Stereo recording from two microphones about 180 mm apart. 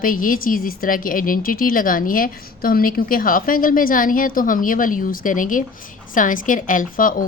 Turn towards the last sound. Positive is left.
turn(degrees=50)  # may be behind; listen again after turning